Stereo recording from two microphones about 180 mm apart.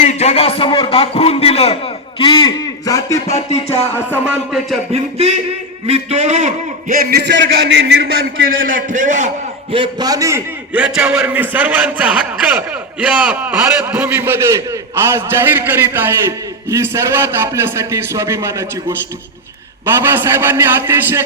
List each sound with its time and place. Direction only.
0.0 s a man's voice: 40° left (ahead or behind); by 3.2 s 20° left (ahead or behind)
3.5 s music: 35° left (ahead or behind)
4.9 s a man's voice: 35° right (ahead or behind); by 8.4 s 90° right
8.4 s a man's voice: 50° right (ahead or behind)
9.7 s a man's voice: 25° right (ahead or behind)
19.8 s a man's voice: 10° right (ahead or behind)